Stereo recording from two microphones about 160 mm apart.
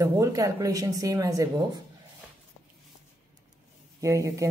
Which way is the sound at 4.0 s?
20° right (ahead or behind).